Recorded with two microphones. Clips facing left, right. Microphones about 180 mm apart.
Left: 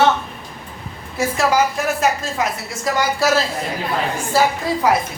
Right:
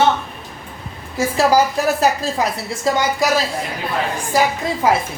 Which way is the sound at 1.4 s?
35° right (ahead or behind).